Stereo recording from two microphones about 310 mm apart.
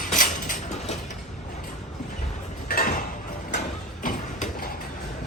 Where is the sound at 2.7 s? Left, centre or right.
Left.